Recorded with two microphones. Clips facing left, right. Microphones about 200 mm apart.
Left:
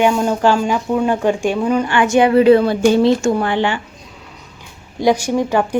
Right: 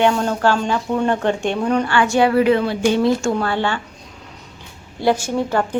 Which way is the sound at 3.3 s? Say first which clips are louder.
Left 3 dB; 15° left (ahead or behind).